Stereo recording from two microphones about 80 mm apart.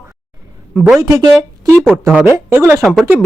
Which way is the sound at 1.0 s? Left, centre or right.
Right.